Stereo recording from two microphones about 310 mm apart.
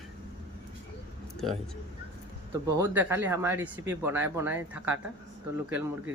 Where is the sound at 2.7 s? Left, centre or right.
Centre.